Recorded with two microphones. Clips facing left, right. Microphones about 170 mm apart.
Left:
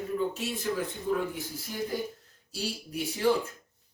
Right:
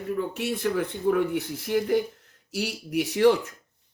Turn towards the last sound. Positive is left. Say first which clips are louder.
# right 7 dB
turn(degrees=-75)  # may be behind; listen again after turning